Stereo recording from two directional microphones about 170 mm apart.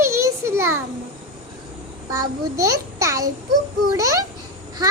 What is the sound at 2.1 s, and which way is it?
A child's voice, 20° right (ahead or behind).